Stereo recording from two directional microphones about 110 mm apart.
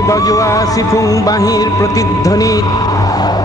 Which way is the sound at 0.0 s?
30° left (ahead or behind).